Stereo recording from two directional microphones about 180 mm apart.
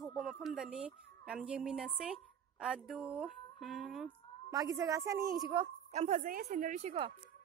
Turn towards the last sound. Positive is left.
turn(degrees=-35)  # may be behind; listen again after turning